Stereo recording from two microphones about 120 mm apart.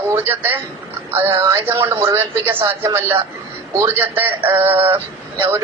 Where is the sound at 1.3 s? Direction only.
35° right (ahead or behind).